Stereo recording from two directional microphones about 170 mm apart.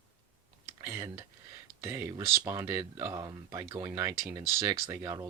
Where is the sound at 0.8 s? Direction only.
15° right (ahead or behind).